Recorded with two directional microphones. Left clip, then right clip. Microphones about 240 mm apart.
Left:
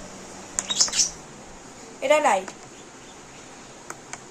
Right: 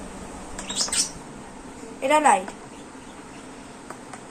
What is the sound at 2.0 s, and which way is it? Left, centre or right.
Speech, left.